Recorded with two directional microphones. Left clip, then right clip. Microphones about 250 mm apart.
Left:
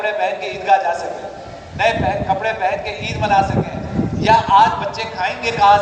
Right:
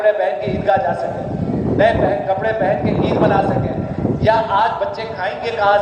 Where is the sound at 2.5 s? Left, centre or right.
Left.